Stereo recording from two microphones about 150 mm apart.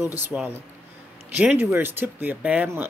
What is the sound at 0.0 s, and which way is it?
Speech, 15° right (ahead or behind).